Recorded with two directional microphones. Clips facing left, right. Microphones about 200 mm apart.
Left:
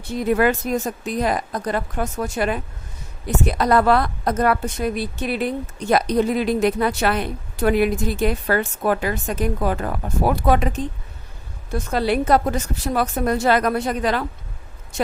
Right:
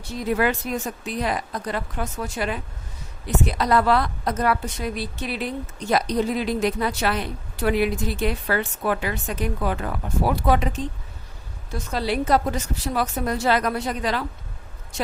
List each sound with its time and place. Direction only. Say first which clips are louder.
0.0 s a woman's voice: left 4 dB; 55° left (ahead or behind)
11.7 s a woman's voice: left 5 dB; 55° left (ahead or behind)